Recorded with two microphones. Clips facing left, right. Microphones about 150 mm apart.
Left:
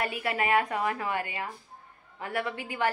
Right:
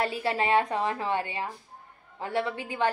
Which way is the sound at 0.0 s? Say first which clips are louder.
Right 2 dB; 30° right (ahead or behind).